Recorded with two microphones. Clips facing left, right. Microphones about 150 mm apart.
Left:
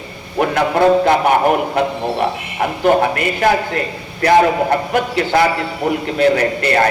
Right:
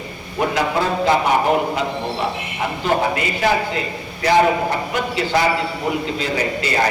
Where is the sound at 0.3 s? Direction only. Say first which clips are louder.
Left 4 dB; 60° left (ahead or behind).